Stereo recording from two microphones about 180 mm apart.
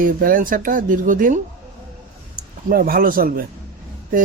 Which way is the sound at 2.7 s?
55° right (ahead or behind).